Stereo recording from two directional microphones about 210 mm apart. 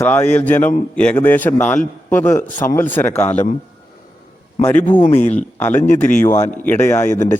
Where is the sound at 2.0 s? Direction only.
10° left (ahead or behind).